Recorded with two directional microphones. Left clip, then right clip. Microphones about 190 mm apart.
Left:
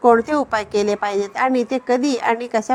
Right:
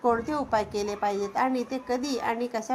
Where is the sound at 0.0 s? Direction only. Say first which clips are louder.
Left 11 dB; 45° left (ahead or behind).